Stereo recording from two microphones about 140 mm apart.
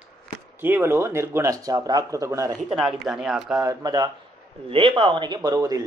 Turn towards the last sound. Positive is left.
turn(degrees=-25)  # may be behind; listen again after turning